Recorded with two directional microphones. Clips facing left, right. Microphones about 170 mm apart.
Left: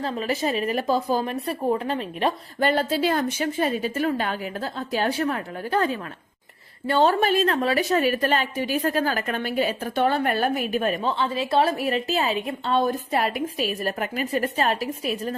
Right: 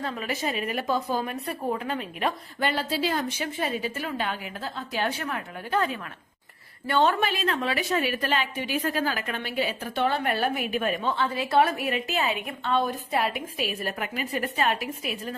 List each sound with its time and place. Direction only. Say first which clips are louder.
0.0 s a woman's voice: left 5 dB; 35° left (ahead or behind)
2.6 s a woman's voice: left 5 dB; 50° left (ahead or behind)
11.1 s a woman's voice: left 2 dB; 25° left (ahead or behind)